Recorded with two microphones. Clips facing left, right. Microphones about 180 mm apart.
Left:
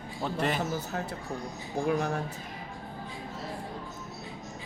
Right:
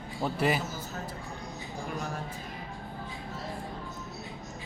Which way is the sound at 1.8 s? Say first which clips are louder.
Left 9 dB; 65° left (ahead or behind).